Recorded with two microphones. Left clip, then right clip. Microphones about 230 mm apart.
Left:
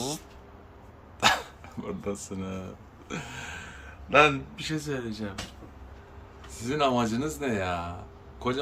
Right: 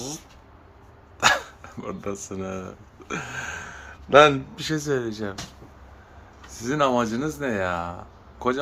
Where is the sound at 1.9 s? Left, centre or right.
Centre.